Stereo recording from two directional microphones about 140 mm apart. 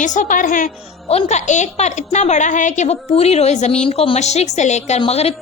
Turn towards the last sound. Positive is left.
turn(degrees=50)  # may be behind; listen again after turning